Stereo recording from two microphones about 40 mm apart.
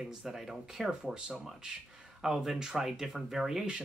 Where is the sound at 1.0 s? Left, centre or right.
Centre.